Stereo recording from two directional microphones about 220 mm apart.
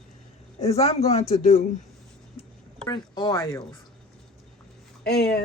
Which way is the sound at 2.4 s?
25° left (ahead or behind).